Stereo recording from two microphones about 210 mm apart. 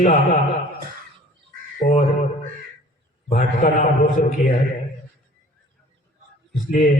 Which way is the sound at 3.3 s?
40° left (ahead or behind).